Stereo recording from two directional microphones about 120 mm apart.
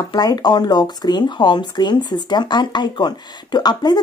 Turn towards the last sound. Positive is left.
turn(degrees=35)  # may be behind; listen again after turning